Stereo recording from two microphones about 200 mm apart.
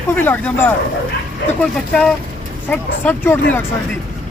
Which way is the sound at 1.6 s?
5° left (ahead or behind).